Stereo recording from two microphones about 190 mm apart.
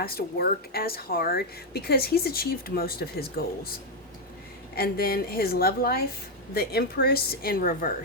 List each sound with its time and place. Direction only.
0.0 s speech: 55° left (ahead or behind)
4.7 s speech: 55° left (ahead or behind)